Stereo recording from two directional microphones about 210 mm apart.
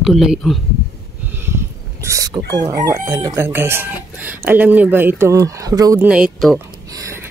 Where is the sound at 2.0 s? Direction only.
15° right (ahead or behind).